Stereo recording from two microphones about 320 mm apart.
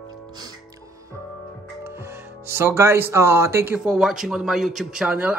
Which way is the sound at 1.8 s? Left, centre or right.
Centre.